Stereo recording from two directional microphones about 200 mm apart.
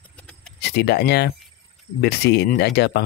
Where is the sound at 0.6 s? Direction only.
55° left (ahead or behind).